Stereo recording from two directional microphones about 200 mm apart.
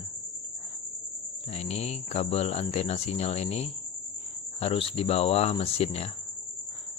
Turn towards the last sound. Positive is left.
turn(degrees=30)  # may be behind; listen again after turning